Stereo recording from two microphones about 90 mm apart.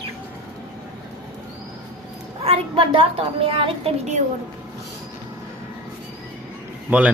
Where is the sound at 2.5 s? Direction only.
80° right.